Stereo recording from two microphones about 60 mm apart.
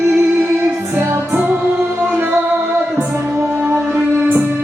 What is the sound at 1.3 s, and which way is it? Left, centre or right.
Music, right.